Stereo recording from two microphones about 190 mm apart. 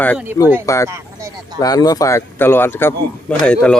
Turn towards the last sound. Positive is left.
turn(degrees=5)  # may be behind; listen again after turning